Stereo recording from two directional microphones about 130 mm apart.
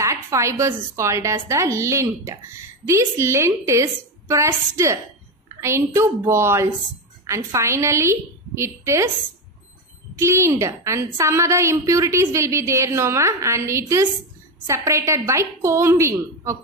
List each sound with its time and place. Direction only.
0.0 s a woman's voice: 20° right (ahead or behind)
10.1 s a woman's voice: 20° right (ahead or behind)